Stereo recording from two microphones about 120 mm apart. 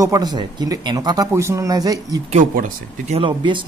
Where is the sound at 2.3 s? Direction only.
85° right.